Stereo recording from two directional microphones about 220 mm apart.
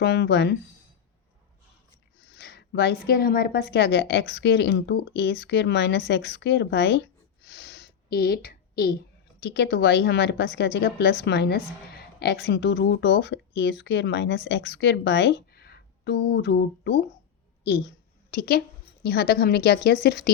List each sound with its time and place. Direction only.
0.0 s a woman's voice: 50° left (ahead or behind)
2.2 s a woman's voice: 50° left (ahead or behind)
7.4 s a sound: 50° left (ahead or behind)
9.4 s a woman's voice: 50° left (ahead or behind)
17.6 s a sound: 50° left (ahead or behind)
19.0 s a woman's voice: 45° left (ahead or behind)